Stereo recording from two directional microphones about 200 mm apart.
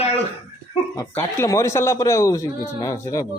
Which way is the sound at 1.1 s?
15° left (ahead or behind).